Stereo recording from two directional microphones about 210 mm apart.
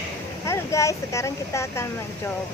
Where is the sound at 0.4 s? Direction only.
15° left (ahead or behind).